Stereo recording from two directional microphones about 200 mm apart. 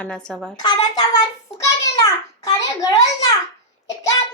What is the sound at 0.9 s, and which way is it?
Speech, 20° left (ahead or behind).